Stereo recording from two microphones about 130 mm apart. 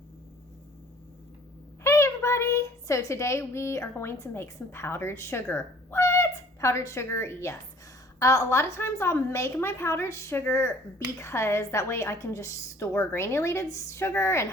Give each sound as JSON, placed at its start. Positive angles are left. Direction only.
{"t": 1.8, "sound": "a child's voice", "side_deg": 20}